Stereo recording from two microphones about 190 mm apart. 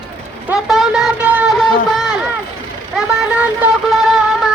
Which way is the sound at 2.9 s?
5° right (ahead or behind).